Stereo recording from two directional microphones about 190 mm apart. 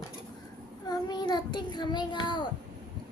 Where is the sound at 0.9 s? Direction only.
25° left (ahead or behind).